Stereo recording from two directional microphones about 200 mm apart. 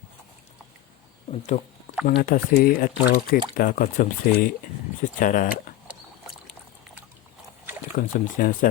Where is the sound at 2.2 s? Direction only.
45° left (ahead or behind).